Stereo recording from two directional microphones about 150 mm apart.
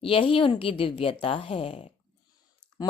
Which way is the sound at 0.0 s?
35° left (ahead or behind).